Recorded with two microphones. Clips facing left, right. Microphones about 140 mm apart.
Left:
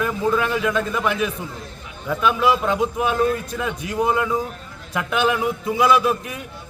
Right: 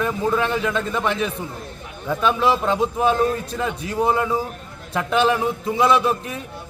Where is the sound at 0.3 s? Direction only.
30° right (ahead or behind).